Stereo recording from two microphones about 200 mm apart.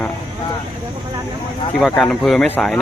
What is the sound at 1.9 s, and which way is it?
Speech, 5° left (ahead or behind).